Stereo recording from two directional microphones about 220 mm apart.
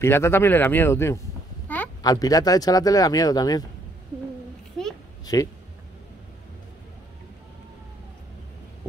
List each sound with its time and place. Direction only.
0.0 s speech: 10° left (ahead or behind)
5.2 s speech: 15° left (ahead or behind)